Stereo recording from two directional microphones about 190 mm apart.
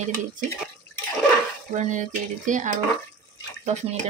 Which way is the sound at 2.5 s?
40° right (ahead or behind).